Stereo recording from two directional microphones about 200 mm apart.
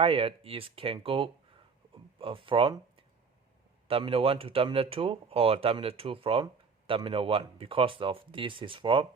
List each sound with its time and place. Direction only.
0.0 s speech: 30° right (ahead or behind)